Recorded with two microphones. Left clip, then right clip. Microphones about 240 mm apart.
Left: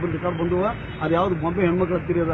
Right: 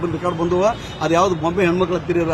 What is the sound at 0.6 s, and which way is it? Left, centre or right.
A man's voice, right.